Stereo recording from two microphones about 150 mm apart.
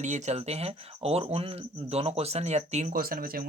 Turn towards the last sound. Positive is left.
turn(degrees=-70)  # may be behind; listen again after turning